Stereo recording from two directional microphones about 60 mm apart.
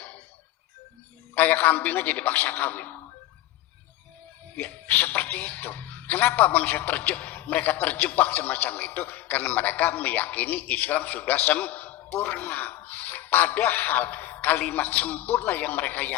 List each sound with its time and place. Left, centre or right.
1.4 s a man's voice: left
4.5 s a man's voice: left